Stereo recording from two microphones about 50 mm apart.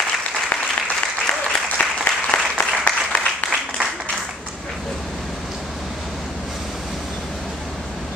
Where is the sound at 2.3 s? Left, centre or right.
Centre.